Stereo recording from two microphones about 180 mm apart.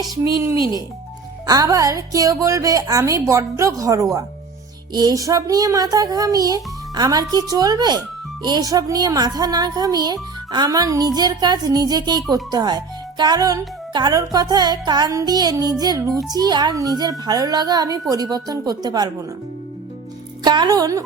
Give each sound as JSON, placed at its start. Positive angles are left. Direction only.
{"t": 1.5, "sound": "a woman's voice", "side_deg": -20}
{"t": 20.4, "sound": "a woman's voice", "side_deg": -25}